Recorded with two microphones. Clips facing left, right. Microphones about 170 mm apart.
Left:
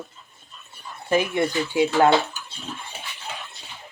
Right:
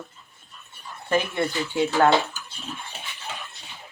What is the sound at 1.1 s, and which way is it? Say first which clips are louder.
Speech: left 3 dB; 15° left (ahead or behind).